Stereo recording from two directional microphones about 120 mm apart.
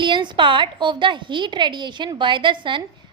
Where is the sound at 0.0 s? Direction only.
40° right (ahead or behind).